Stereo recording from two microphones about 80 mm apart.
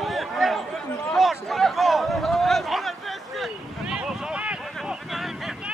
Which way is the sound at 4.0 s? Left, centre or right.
Centre.